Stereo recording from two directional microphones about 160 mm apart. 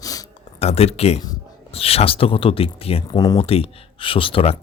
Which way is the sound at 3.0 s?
25° left (ahead or behind).